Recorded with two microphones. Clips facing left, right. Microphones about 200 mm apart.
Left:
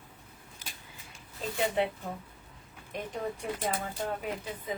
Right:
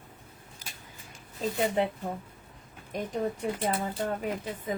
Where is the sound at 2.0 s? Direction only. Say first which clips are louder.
Right 4 dB; 40° right (ahead or behind).